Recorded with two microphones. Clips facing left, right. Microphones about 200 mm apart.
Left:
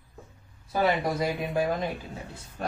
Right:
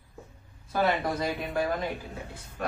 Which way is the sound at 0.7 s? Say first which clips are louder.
Left 1 dB; 15° left (ahead or behind).